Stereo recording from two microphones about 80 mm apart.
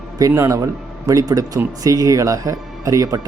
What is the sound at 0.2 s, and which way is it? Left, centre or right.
Speech, right.